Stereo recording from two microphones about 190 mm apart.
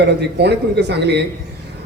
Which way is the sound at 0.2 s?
65° right (ahead or behind).